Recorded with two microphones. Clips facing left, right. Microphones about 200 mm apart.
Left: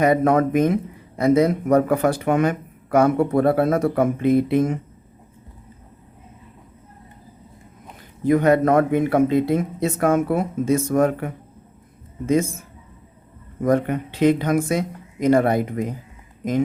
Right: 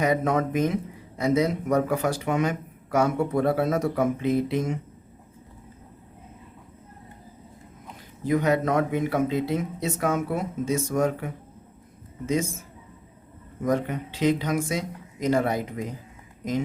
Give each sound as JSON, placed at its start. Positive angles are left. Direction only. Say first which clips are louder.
{"t": 0.0, "sound": "speech", "louder": "left 6 dB", "side_deg": 55}
{"t": 8.2, "sound": "speech", "louder": "left 6 dB", "side_deg": 55}
{"t": 13.6, "sound": "speech", "louder": "left 6 dB", "side_deg": 55}